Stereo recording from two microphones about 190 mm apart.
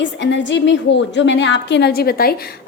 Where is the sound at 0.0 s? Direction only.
70° left (ahead or behind).